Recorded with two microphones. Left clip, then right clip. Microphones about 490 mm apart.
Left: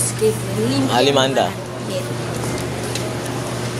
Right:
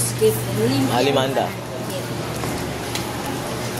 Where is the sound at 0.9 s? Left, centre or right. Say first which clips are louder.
Left 5 dB; right.